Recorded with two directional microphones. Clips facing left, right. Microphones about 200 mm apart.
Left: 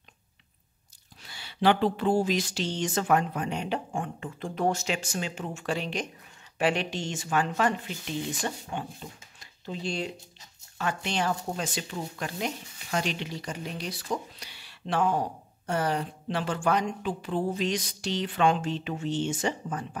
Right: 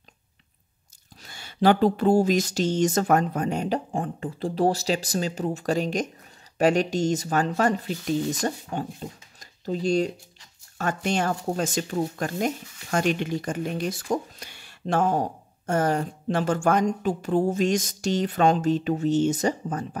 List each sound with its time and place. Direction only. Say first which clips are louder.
1.2 s speech: right 4 dB; 45° right (ahead or behind)